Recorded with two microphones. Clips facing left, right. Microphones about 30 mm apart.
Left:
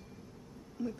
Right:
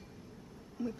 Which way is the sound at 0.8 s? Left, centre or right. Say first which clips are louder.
Even; centre.